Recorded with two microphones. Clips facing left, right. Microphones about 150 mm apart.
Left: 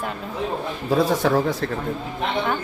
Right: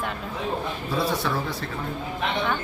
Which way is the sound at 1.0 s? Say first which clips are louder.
Left 7 dB; 45° left (ahead or behind).